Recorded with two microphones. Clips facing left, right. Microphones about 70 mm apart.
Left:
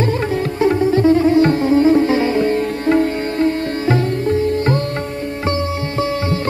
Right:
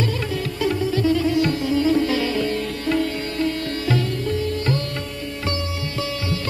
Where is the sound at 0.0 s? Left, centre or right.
Left.